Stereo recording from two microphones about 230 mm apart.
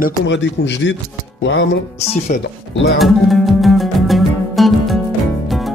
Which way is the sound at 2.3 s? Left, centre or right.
Left.